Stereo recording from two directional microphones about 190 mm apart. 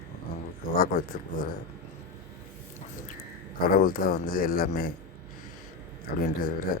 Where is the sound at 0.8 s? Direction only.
50° left (ahead or behind).